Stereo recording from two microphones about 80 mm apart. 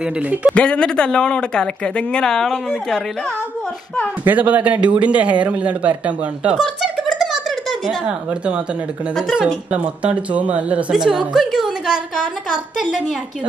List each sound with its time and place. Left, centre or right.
0.0 s speech: centre
0.6 s speech: centre
4.2 s speech: right
6.6 s a sound: centre
8.0 s speech: centre
10.9 s a woman's voice: centre